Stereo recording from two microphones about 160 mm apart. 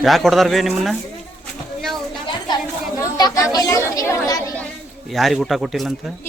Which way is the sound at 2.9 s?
20° left (ahead or behind).